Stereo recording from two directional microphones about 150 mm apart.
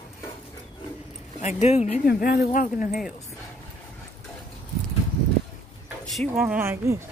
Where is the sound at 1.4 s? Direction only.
50° left (ahead or behind).